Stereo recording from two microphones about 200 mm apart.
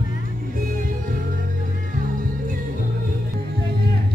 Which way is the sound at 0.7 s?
45° right (ahead or behind).